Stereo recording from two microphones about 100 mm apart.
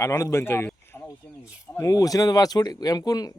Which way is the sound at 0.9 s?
25° left (ahead or behind).